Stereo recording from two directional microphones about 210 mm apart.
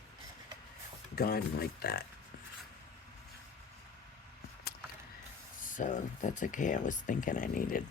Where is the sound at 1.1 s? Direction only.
45° left (ahead or behind).